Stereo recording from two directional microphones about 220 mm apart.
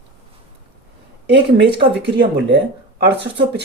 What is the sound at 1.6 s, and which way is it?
Speech, 50° right (ahead or behind).